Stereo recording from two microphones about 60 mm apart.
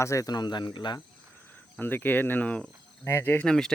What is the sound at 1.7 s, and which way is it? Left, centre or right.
Speech, left.